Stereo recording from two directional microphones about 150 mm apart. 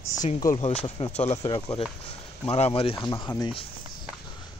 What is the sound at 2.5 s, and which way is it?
Speech, 40° left (ahead or behind).